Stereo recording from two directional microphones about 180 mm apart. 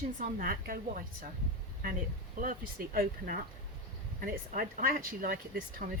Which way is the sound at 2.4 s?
50° right (ahead or behind).